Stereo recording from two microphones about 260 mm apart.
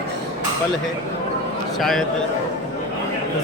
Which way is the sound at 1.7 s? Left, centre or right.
Centre.